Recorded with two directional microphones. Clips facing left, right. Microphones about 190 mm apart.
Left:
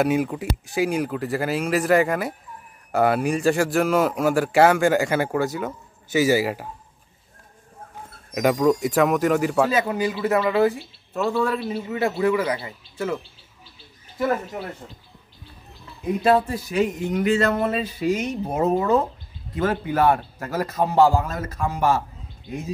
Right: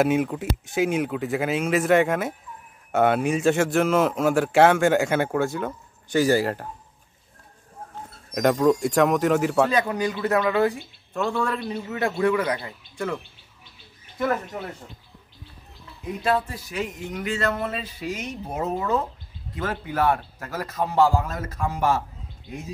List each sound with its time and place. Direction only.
0.0 s a man's voice: centre (ahead or behind)
8.3 s a man's voice: 5° left (ahead or behind)
16.3 s a man's voice: 30° left (ahead or behind)
18.5 s speech: 40° left (ahead or behind)
19.6 s a man's voice: 25° left (ahead or behind)